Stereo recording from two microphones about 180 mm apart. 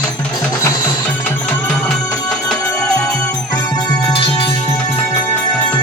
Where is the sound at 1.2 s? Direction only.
5° left (ahead or behind).